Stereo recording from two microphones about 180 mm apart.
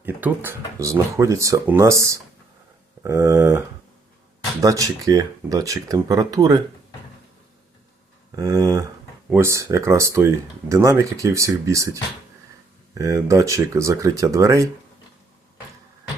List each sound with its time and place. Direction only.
0.0 s speech: 10° right (ahead or behind)
4.6 s speech: 20° right (ahead or behind)
8.4 s speech: 20° right (ahead or behind)
12.9 s speech: 20° right (ahead or behind)